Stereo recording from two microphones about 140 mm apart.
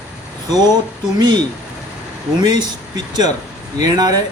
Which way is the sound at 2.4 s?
30° right (ahead or behind).